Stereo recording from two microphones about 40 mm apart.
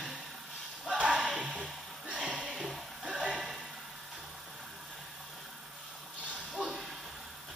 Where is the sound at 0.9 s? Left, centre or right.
Right.